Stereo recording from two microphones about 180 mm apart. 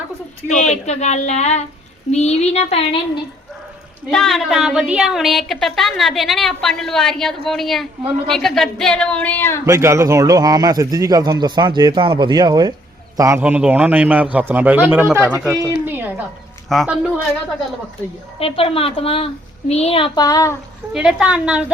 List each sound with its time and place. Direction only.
0.4 s a woman's voice: 40° left (ahead or behind)
4.1 s a woman's voice: centre (ahead or behind)
9.6 s a man's voice: 15° right (ahead or behind)
18.3 s a woman's voice: 30° left (ahead or behind)
20.9 s a woman's voice: 5° right (ahead or behind)